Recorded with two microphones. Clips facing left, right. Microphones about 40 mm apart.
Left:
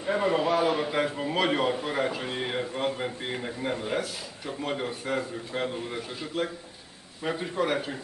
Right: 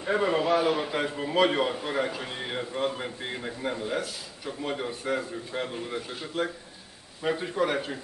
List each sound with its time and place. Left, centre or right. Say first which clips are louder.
0.0 s a man's voice: even; centre
3.7 s speech: left 1 dB; centre
4.0 s a man's voice: left 1 dB; centre